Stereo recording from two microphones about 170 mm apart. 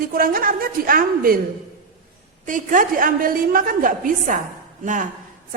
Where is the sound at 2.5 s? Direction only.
50° right (ahead or behind).